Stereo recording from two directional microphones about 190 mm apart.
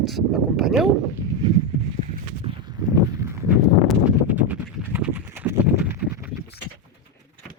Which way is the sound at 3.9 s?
5° right (ahead or behind).